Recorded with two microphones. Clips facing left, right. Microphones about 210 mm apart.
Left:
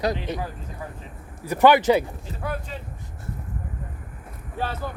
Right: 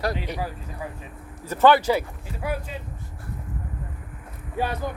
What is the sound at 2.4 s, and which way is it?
Speech, 10° right (ahead or behind).